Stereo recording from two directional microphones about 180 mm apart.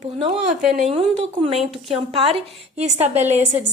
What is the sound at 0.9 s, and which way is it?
A woman's voice, 35° right (ahead or behind).